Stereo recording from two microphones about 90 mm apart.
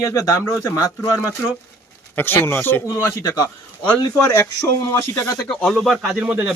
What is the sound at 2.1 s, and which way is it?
Speech, 25° left (ahead or behind).